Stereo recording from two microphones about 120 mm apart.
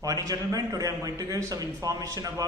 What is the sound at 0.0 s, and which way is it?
A man's voice, 30° right (ahead or behind).